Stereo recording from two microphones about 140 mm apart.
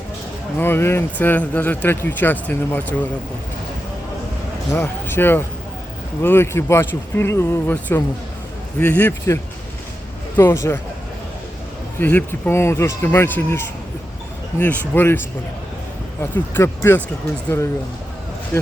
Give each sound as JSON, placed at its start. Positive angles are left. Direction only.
{"t": 0.6, "sound": "speech", "side_deg": 15}
{"t": 4.7, "sound": "speech", "side_deg": 15}
{"t": 11.9, "sound": "speech", "side_deg": 15}
{"t": 14.6, "sound": "speech", "side_deg": 15}
{"t": 16.2, "sound": "speech", "side_deg": 15}
{"t": 18.5, "sound": "a sound", "side_deg": 15}